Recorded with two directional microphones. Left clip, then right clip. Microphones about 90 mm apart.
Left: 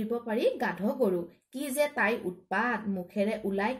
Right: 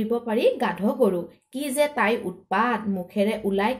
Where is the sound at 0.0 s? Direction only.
20° left (ahead or behind).